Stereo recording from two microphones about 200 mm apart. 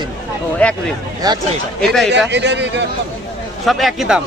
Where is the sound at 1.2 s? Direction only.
20° right (ahead or behind).